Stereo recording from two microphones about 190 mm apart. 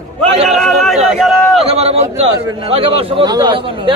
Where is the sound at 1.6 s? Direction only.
30° right (ahead or behind).